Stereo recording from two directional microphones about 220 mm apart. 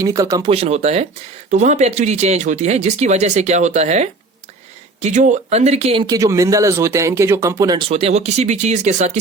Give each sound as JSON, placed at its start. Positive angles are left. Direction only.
{"t": 0.0, "sound": "speech", "side_deg": -15}